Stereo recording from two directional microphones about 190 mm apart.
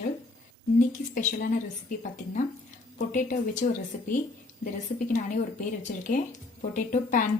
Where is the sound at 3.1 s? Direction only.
45° left (ahead or behind).